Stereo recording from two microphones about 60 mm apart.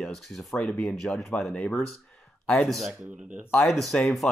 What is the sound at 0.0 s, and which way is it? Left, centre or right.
Speech, centre.